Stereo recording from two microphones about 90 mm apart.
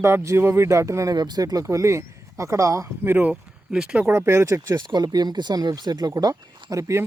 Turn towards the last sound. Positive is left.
turn(degrees=-35)  # may be behind; listen again after turning